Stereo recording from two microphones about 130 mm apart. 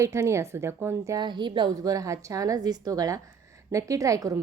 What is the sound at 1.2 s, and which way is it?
A woman's voice, 35° right (ahead or behind).